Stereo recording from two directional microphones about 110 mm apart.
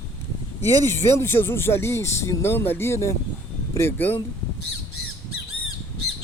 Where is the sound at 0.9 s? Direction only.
25° left (ahead or behind).